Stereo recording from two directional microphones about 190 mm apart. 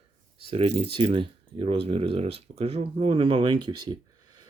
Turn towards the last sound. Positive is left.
turn(degrees=-25)  # may be behind; listen again after turning